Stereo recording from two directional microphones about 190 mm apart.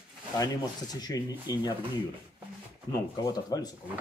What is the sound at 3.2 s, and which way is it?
Speech, 20° left (ahead or behind).